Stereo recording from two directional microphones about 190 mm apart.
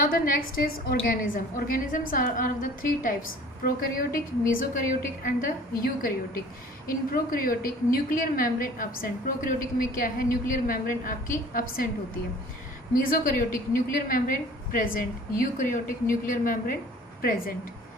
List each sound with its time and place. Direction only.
0.0 s a woman's voice: 45° left (ahead or behind)
12.9 s a woman's voice: 45° left (ahead or behind)